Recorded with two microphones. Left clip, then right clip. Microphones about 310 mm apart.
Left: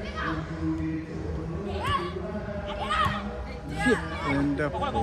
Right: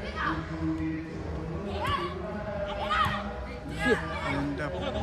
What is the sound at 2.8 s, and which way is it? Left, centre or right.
Heart sounds, left.